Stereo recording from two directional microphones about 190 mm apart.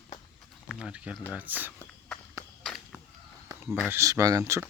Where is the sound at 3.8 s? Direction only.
15° right (ahead or behind).